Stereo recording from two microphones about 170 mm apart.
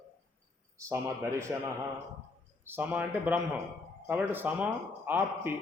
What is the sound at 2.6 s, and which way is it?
Speech, 10° right (ahead or behind).